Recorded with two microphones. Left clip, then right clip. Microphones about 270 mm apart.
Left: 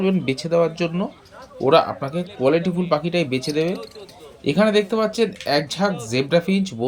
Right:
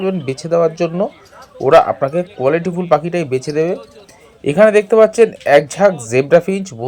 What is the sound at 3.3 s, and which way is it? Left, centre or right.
A man's voice, centre.